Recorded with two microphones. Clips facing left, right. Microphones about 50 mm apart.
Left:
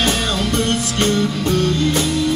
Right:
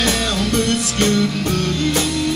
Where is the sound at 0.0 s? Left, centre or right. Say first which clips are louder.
Even; left.